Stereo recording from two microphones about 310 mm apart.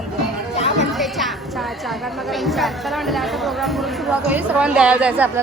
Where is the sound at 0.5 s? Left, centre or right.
Centre.